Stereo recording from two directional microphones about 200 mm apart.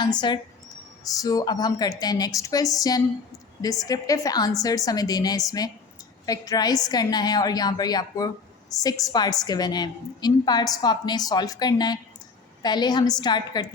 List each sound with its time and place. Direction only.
0.0 s a woman's voice: 20° left (ahead or behind)